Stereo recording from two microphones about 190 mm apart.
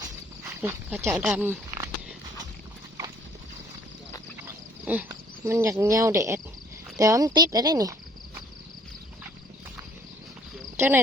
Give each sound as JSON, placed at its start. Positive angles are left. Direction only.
{"t": 0.0, "sound": "a sound", "side_deg": -15}
{"t": 5.0, "sound": "speech", "side_deg": -15}
{"t": 10.8, "sound": "cricket", "side_deg": -10}